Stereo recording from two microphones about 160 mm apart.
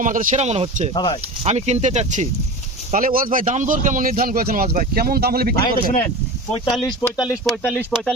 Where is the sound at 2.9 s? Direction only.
60° right (ahead or behind); by 5.5 s 75° right (ahead or behind).